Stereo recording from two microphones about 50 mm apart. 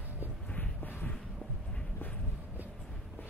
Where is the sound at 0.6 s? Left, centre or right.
Left.